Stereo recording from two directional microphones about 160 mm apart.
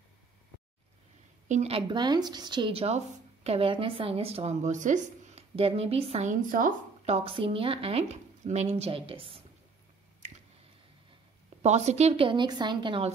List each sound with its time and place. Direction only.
1.5 s a woman's voice: 40° right (ahead or behind)
11.6 s a woman's voice: 45° right (ahead or behind)